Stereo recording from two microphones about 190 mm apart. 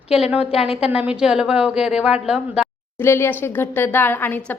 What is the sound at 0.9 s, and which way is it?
A woman's voice, 5° right (ahead or behind).